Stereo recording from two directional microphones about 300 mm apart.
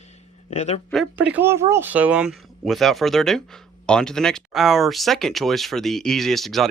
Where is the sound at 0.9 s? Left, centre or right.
Centre.